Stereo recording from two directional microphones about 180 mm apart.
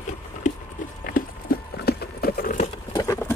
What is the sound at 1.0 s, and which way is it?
Horse, 55° left (ahead or behind).